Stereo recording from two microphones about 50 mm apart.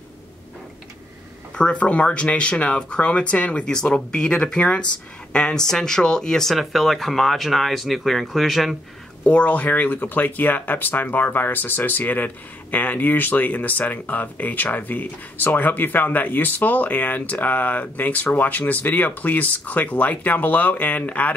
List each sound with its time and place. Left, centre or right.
1.6 s speech: left
6.5 s speech: centre
9.2 s speech: left